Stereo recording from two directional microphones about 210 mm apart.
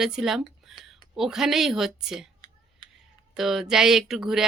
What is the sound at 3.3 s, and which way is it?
Speech, centre (ahead or behind).